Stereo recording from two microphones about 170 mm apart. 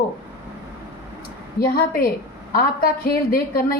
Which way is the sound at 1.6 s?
60° left (ahead or behind).